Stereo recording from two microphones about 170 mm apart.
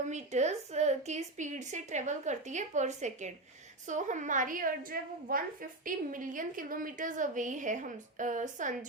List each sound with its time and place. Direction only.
0.1 s a woman's voice: 40° right (ahead or behind)